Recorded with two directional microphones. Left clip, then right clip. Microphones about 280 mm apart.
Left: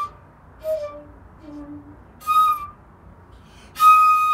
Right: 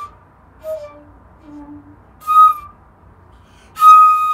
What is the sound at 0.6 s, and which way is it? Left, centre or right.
Flute, centre.